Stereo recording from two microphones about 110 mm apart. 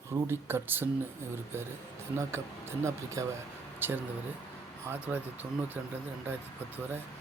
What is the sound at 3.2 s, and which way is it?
Speech, 30° right (ahead or behind).